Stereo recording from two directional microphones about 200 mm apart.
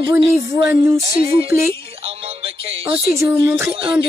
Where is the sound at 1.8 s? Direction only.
30° right (ahead or behind).